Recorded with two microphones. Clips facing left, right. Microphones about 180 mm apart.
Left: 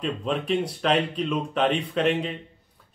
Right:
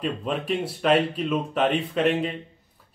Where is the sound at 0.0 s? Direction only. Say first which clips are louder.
Even; 5° right (ahead or behind).